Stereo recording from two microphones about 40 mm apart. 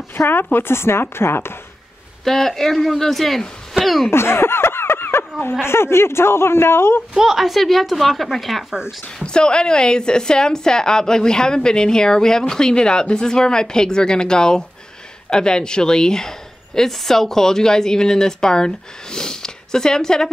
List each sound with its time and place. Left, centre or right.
0.1 s speech: left
2.2 s speech: centre
4.1 s a sound: left
5.7 s speech: left
7.2 s speech: centre
9.2 s a woman's voice: left